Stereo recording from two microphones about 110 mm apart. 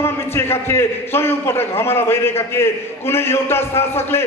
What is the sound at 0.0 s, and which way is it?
A man's voice, 20° left (ahead or behind).